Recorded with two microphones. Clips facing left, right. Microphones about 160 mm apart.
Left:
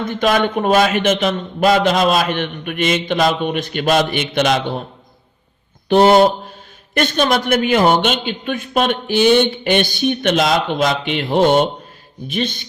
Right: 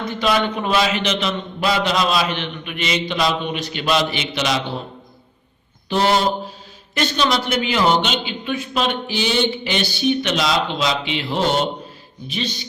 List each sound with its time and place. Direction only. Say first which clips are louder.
0.0 s a man's voice: left 3 dB; 50° left (ahead or behind)
5.9 s a man's voice: left 7 dB; 55° left (ahead or behind)